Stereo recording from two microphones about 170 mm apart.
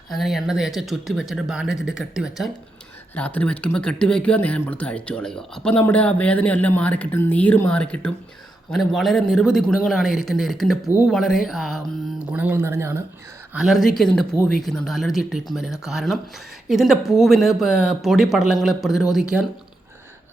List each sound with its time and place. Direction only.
0.1 s speech: centre (ahead or behind)
3.2 s speech: 10° left (ahead or behind); by 13.0 s 15° right (ahead or behind)
13.5 s speech: 5° right (ahead or behind)